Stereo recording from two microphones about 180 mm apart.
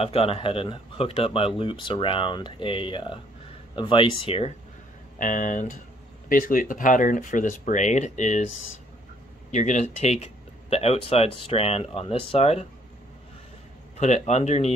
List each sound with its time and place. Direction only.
0.0 s speech: 30° left (ahead or behind)
5.2 s speech: 45° left (ahead or behind)
9.5 s speech: 40° left (ahead or behind)
13.9 s speech: 40° left (ahead or behind)